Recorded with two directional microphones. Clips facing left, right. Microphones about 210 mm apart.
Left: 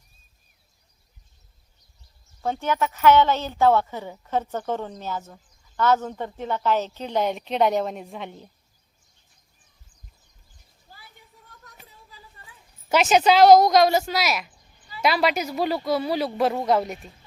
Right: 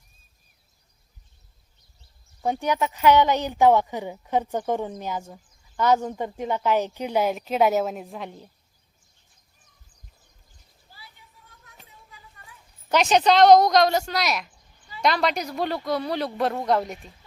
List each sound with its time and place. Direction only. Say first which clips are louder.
2.4 s a woman's voice: right 1 dB; 15° right (ahead or behind)
12.9 s speech: left 1 dB; 5° left (ahead or behind)